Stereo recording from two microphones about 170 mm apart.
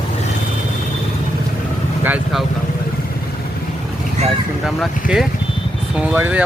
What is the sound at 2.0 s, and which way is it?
Speech, 10° right (ahead or behind).